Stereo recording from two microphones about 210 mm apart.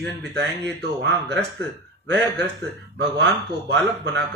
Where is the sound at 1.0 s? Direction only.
55° right (ahead or behind).